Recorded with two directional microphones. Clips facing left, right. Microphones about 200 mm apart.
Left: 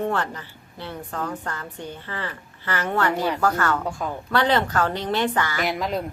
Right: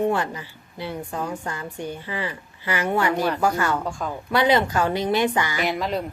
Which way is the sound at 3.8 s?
5° left (ahead or behind).